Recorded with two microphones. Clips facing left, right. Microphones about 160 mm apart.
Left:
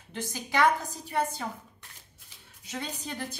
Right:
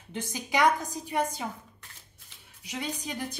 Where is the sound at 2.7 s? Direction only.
15° right (ahead or behind).